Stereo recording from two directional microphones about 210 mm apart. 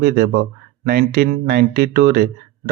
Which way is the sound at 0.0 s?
50° right (ahead or behind).